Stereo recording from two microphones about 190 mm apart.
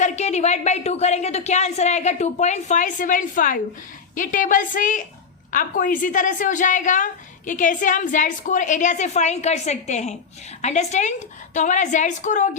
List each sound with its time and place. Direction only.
0.0 s a woman's voice: 35° left (ahead or behind)